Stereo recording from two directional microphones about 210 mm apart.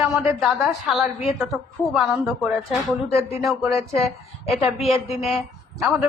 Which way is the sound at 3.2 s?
30° left (ahead or behind).